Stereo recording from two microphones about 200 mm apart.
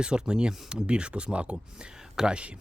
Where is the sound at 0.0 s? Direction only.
5° right (ahead or behind).